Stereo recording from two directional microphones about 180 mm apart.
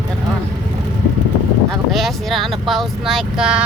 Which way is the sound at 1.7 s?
Centre (ahead or behind).